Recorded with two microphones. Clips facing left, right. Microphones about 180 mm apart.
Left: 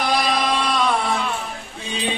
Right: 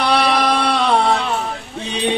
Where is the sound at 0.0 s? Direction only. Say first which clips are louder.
Right 4 dB; 70° right (ahead or behind).